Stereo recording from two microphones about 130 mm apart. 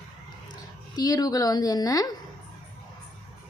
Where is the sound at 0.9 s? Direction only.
30° left (ahead or behind).